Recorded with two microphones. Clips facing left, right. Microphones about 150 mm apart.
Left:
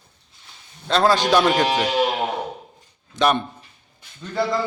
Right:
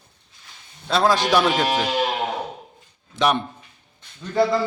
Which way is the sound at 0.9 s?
5° right (ahead or behind).